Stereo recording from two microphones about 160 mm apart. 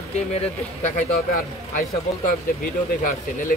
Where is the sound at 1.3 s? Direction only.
60° left (ahead or behind).